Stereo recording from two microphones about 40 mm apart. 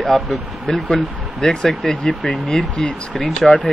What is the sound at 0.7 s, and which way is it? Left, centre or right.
Speech, centre.